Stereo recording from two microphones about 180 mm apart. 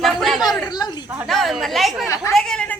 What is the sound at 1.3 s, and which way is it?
Speech, centre (ahead or behind).